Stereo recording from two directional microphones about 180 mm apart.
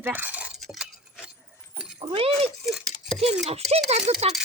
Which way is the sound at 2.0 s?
30° right (ahead or behind).